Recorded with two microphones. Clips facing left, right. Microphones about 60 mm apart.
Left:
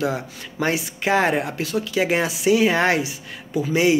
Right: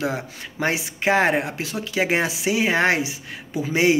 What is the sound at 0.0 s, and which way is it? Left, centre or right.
Speech, right.